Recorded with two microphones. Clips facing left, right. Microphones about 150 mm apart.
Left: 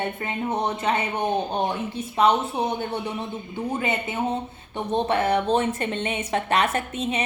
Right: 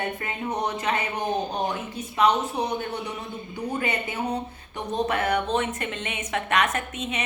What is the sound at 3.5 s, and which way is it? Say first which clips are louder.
A woman's voice: left 2 dB; 25° left (ahead or behind).